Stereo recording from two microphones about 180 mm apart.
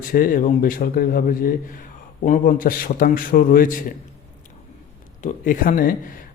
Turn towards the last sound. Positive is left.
turn(degrees=50)  # may be behind; listen again after turning